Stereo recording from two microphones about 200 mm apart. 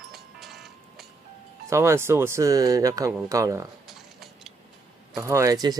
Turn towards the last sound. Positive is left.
turn(degrees=-20)  # may be behind; listen again after turning